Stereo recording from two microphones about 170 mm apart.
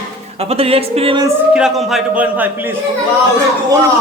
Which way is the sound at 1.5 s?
Centre (ahead or behind).